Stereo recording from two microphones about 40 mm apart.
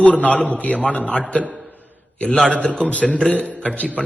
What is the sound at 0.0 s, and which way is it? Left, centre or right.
A man's voice, left.